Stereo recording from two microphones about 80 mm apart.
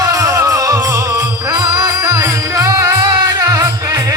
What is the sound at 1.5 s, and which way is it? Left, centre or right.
Music, right.